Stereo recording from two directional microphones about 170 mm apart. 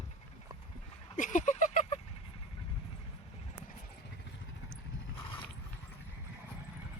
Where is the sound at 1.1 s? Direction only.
50° left (ahead or behind).